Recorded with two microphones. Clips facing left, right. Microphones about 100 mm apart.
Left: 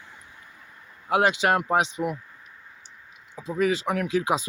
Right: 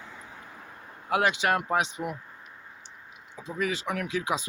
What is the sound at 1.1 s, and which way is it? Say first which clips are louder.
Speech: left 4 dB; 30° left (ahead or behind).